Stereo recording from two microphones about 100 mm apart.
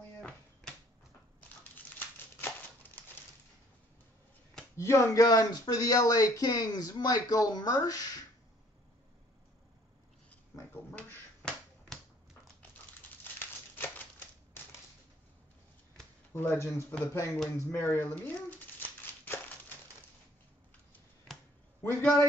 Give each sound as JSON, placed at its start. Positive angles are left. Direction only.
{"t": 1.8, "sound": "crumpling", "side_deg": 20}
{"t": 4.7, "sound": "speech", "side_deg": 30}
{"t": 10.7, "sound": "finger snapping", "side_deg": 15}
{"t": 13.2, "sound": "crumpling", "side_deg": 20}
{"t": 16.3, "sound": "speech", "side_deg": 25}
{"t": 17.5, "sound": "a sound", "side_deg": 20}